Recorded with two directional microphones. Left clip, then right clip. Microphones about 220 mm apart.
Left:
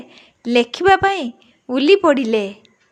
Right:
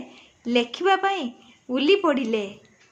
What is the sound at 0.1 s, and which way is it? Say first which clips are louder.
A woman's voice: left 6 dB; 35° left (ahead or behind).